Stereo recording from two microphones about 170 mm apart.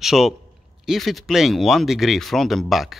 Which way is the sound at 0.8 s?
Centre (ahead or behind).